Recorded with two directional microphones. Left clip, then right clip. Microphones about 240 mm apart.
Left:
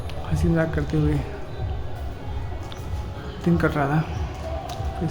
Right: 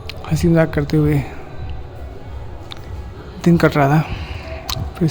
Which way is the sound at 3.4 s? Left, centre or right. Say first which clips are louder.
Right 8 dB; right.